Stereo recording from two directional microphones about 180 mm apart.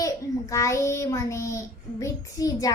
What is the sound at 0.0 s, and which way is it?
A child's voice, 20° left (ahead or behind).